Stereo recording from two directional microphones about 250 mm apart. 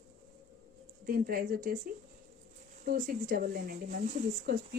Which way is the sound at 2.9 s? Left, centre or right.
Right.